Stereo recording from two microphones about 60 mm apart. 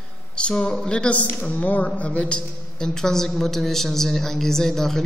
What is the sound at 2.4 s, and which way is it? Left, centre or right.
A woman's voice, centre.